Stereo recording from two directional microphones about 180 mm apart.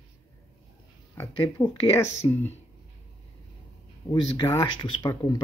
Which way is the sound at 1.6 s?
20° left (ahead or behind).